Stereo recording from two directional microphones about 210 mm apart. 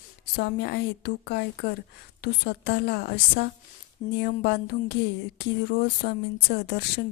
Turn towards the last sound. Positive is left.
turn(degrees=50)  # may be behind; listen again after turning